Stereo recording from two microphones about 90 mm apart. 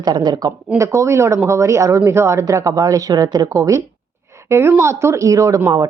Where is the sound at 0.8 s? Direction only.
35° right (ahead or behind).